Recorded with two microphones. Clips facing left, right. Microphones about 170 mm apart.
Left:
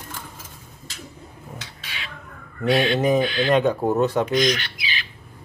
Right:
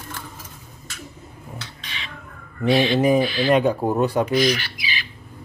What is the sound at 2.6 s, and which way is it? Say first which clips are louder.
A man's voice: right 2 dB; centre (ahead or behind).